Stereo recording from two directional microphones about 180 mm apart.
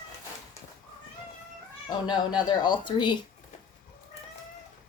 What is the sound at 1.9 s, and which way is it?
Speech, 25° left (ahead or behind).